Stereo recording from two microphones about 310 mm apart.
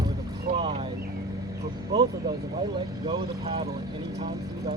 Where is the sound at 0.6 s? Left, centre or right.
Centre.